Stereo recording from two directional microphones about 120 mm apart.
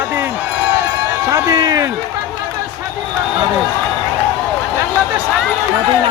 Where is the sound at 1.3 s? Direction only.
25° right (ahead or behind).